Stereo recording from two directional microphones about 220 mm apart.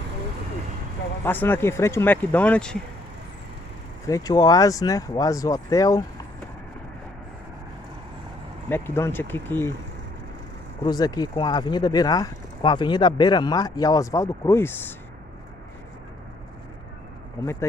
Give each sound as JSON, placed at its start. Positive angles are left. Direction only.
{"t": 1.2, "sound": "speech", "side_deg": 10}
{"t": 4.1, "sound": "speech", "side_deg": 15}
{"t": 8.6, "sound": "speech", "side_deg": 10}
{"t": 10.8, "sound": "speech", "side_deg": 20}
{"t": 17.4, "sound": "speech", "side_deg": 10}